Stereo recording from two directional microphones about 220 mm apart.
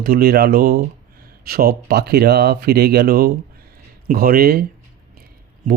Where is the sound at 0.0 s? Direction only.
45° right (ahead or behind).